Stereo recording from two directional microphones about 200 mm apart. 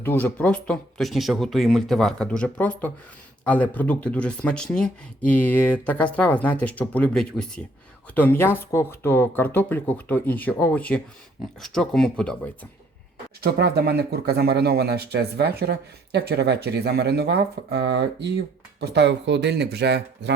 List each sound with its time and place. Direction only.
0.0 s speech: 10° left (ahead or behind)
13.4 s speech: 50° right (ahead or behind)